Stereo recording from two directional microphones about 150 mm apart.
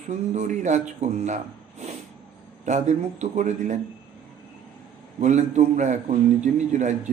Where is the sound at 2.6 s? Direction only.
55° right (ahead or behind).